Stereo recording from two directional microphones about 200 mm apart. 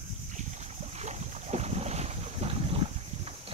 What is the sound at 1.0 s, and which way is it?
Boat, 35° right (ahead or behind).